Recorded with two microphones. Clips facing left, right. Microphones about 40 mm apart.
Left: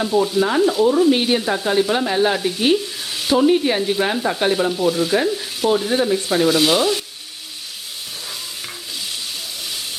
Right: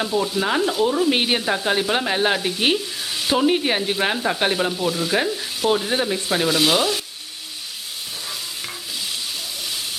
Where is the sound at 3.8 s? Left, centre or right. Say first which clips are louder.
Left 2 dB; centre.